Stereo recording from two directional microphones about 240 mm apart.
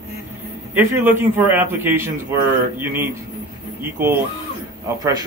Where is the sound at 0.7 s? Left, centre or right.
Centre.